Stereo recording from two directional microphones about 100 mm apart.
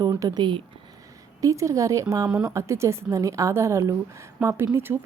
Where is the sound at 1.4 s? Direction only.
35° right (ahead or behind).